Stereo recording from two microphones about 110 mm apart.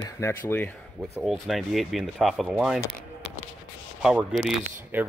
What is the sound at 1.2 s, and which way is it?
Speech, centre (ahead or behind).